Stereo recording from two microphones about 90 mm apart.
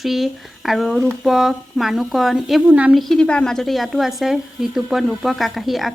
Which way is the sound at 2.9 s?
5° left (ahead or behind).